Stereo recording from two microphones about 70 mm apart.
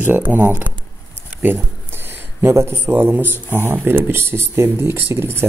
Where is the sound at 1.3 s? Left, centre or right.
Right.